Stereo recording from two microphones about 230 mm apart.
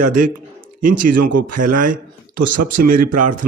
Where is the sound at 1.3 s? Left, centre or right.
Right.